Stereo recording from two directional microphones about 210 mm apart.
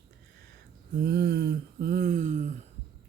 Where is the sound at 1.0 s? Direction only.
50° right (ahead or behind).